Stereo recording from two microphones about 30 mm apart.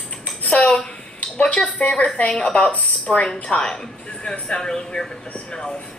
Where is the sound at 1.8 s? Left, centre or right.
Left.